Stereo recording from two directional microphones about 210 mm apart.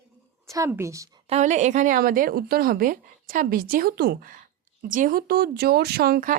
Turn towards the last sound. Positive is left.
turn(degrees=-45)  # may be behind; listen again after turning